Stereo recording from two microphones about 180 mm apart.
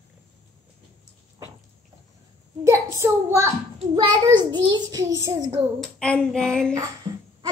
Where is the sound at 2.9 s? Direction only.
15° right (ahead or behind).